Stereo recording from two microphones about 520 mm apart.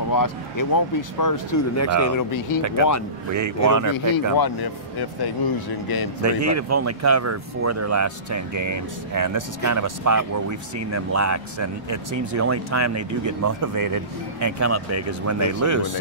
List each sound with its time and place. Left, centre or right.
0.1 s speech: left
3.3 s speech: right
4.4 s speech: left
6.2 s speech: right